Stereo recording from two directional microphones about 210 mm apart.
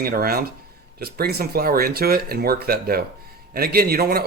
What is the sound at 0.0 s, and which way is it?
Speech, 45° right (ahead or behind).